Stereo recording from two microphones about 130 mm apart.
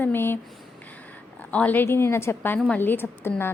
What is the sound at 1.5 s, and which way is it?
A woman's voice, 15° left (ahead or behind).